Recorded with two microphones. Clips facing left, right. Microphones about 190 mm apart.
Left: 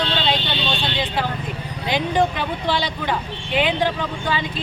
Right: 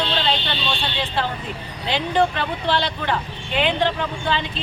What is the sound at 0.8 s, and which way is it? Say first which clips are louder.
Speech: left 1 dB; 10° left (ahead or behind).